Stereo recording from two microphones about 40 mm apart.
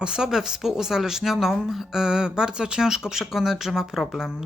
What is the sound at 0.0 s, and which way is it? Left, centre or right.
Speech, centre.